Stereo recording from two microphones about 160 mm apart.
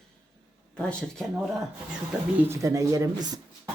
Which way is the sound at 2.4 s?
20° right (ahead or behind).